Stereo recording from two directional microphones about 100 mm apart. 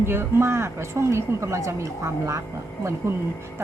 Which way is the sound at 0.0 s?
25° right (ahead or behind).